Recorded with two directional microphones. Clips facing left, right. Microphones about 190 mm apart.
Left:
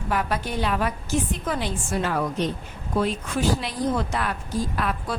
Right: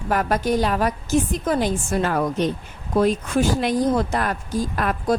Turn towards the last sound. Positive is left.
turn(degrees=-45)  # may be behind; listen again after turning